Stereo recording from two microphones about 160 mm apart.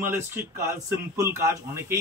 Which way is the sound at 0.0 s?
15° right (ahead or behind).